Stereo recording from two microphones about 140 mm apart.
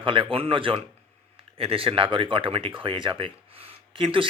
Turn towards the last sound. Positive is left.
turn(degrees=-40)  # may be behind; listen again after turning